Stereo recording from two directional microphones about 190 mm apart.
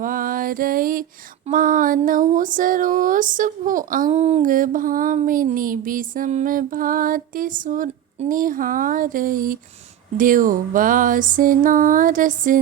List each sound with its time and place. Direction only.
0.0 s mantra: 45° right (ahead or behind)
1.5 s speech: 45° right (ahead or behind)